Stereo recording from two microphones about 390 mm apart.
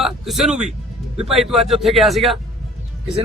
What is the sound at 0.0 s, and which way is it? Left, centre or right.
Speech, centre.